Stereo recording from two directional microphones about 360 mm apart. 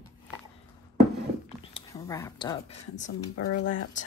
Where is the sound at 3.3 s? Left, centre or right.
Left.